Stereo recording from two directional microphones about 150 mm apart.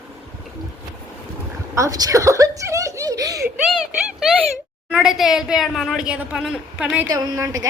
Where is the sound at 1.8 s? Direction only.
25° right (ahead or behind).